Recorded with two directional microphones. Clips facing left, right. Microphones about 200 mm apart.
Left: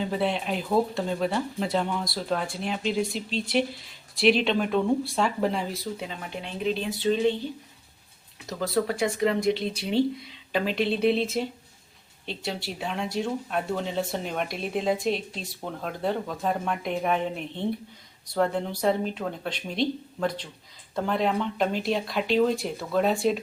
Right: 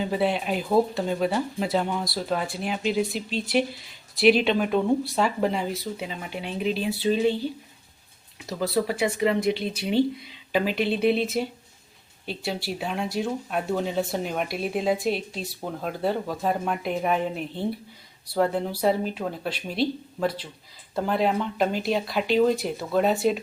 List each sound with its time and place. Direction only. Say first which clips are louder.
0.1 s speech: right 2 dB; 5° right (ahead or behind)
8.4 s speech: right 1 dB; 5° right (ahead or behind)